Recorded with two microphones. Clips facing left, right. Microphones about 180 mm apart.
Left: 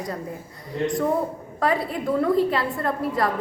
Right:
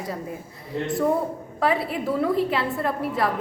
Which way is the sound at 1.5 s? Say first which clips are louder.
Even; 5° right (ahead or behind).